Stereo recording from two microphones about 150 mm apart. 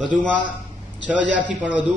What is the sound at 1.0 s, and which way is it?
Speech, 10° right (ahead or behind).